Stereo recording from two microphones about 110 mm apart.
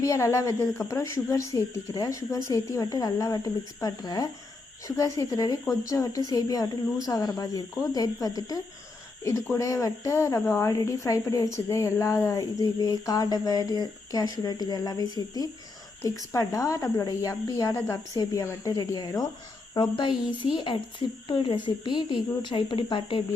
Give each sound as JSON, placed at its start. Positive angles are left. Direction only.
{"t": 0.0, "sound": "a woman's voice", "side_deg": 25}
{"t": 2.5, "sound": "a sound", "side_deg": 30}
{"t": 9.2, "sound": "a woman's voice", "side_deg": 25}
{"t": 11.7, "sound": "a sound", "side_deg": 25}
{"t": 17.7, "sound": "a woman's voice", "side_deg": 25}
{"t": 19.7, "sound": "speech", "side_deg": 45}